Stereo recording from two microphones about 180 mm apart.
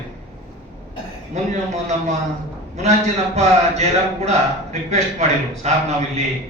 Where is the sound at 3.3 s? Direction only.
35° right (ahead or behind).